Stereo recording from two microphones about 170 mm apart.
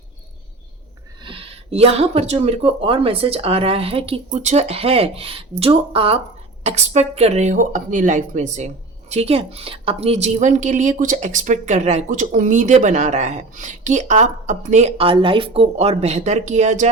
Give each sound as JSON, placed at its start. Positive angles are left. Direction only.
{"t": 1.2, "sound": "speech", "side_deg": -35}